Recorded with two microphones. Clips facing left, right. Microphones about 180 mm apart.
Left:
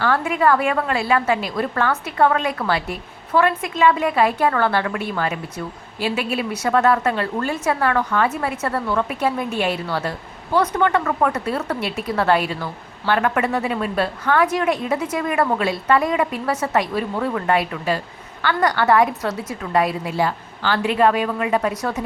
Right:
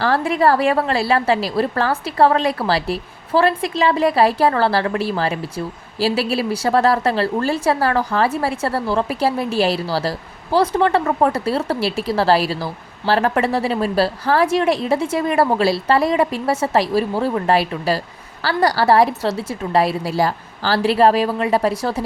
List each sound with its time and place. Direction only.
0.0 s a woman's voice: 35° right (ahead or behind)